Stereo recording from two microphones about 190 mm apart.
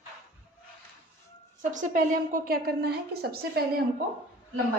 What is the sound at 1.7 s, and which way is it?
A woman's voice, 40° right (ahead or behind).